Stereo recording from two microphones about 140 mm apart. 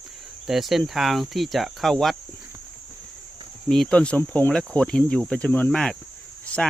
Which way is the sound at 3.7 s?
5° left (ahead or behind).